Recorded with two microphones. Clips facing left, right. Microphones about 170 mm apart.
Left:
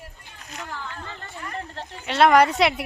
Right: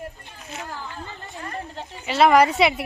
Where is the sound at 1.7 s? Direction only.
Centre (ahead or behind).